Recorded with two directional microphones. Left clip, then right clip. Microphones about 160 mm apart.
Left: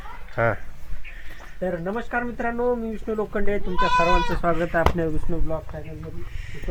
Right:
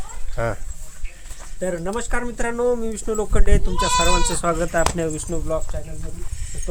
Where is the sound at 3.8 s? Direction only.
50° right (ahead or behind).